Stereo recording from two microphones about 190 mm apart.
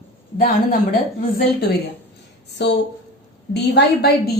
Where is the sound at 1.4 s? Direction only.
55° left (ahead or behind).